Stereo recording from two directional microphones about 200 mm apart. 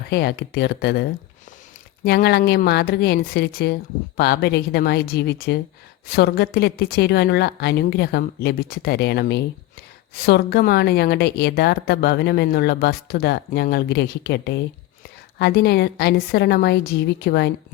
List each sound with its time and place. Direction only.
0.1 s speech: 55° left (ahead or behind)
2.0 s speech: 55° left (ahead or behind)